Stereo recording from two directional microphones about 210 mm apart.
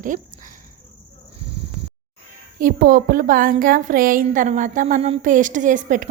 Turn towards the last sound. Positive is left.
turn(degrees=-40)  # may be behind; listen again after turning